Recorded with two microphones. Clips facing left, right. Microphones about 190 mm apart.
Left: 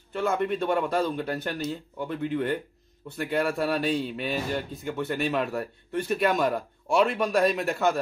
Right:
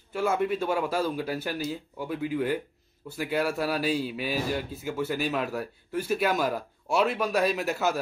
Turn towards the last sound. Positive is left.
turn(degrees=-5)  # may be behind; listen again after turning